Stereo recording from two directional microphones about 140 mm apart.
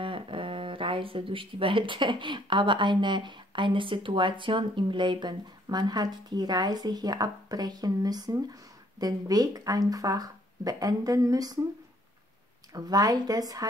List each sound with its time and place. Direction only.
0.0 s speech: 40° right (ahead or behind)
12.7 s speech: 25° right (ahead or behind)